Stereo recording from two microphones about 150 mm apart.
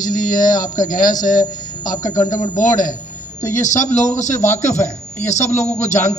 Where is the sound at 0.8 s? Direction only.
65° left (ahead or behind).